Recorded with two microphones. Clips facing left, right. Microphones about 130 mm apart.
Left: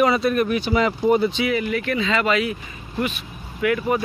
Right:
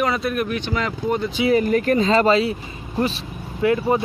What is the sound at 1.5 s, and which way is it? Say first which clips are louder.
Speech: right 5 dB; 40° right (ahead or behind).